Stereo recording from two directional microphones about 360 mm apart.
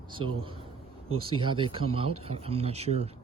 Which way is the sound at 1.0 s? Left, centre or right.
Right.